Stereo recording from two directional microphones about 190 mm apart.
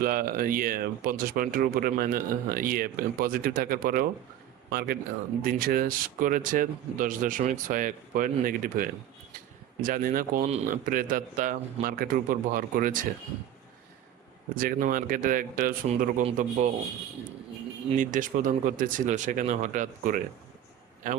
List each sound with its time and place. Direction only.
0.0 s speech: 50° right (ahead or behind)
14.5 s speech: 45° right (ahead or behind)
16.2 s a man's voice: 35° right (ahead or behind)
17.9 s speech: 45° right (ahead or behind)